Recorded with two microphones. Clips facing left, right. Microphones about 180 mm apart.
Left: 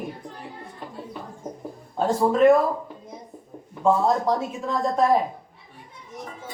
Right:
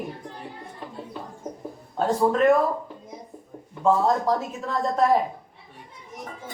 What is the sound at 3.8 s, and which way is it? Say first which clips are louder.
Speech: even; 5° left (ahead or behind).